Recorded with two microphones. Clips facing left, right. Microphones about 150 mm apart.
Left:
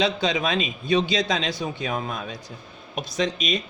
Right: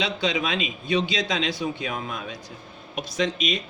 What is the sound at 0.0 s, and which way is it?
Speech, 40° left (ahead or behind).